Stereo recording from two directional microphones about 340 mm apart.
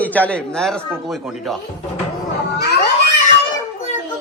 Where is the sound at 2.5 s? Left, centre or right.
Left.